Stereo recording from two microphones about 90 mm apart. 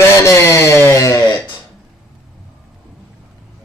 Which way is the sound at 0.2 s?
30° left (ahead or behind).